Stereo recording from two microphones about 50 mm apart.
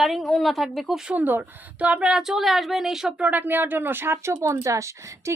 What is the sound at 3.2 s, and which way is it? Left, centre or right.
Speech, right.